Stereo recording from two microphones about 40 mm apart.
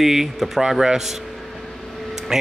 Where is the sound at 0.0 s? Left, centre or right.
Centre.